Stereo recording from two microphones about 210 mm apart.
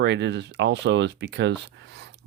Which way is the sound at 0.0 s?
55° right (ahead or behind).